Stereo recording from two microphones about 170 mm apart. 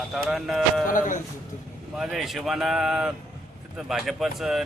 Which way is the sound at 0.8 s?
50° left (ahead or behind).